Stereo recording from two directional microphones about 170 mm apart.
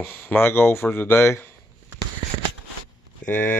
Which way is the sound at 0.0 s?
10° left (ahead or behind).